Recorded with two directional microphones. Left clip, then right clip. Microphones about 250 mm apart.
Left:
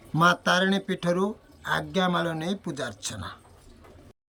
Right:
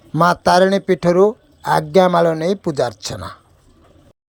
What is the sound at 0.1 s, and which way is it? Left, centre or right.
Speech, centre.